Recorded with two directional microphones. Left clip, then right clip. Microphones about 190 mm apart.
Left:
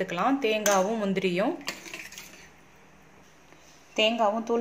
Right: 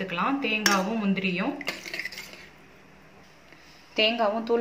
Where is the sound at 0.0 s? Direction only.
60° left (ahead or behind).